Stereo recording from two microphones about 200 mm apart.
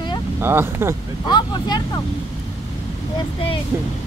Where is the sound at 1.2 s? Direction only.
20° left (ahead or behind).